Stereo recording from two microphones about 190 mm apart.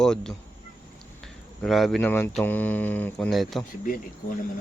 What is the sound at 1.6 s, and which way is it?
Speech, centre (ahead or behind).